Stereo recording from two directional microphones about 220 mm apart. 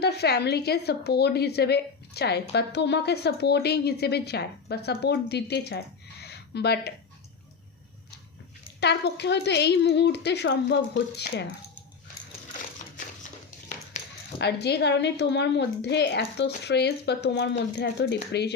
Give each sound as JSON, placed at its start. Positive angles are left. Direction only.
{"t": 0.0, "sound": "a woman's voice", "side_deg": 50}
{"t": 8.8, "sound": "a woman's voice", "side_deg": 50}
{"t": 14.0, "sound": "a sound", "side_deg": 35}
{"t": 14.3, "sound": "a woman's voice", "side_deg": 50}